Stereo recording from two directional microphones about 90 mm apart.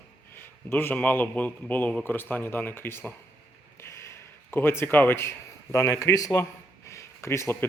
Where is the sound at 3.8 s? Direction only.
30° left (ahead or behind).